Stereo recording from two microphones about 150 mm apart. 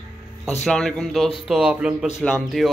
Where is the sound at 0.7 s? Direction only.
5° left (ahead or behind).